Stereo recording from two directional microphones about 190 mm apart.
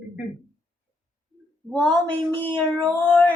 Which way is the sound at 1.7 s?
5° left (ahead or behind).